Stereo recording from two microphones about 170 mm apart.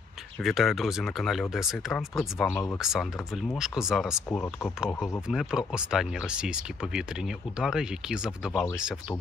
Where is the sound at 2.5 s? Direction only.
15° left (ahead or behind).